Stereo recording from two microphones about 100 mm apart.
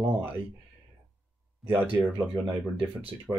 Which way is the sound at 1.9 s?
15° right (ahead or behind).